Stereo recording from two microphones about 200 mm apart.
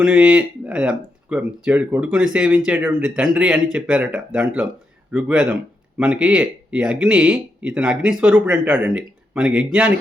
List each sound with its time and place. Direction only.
0.0 s speech: 5° right (ahead or behind)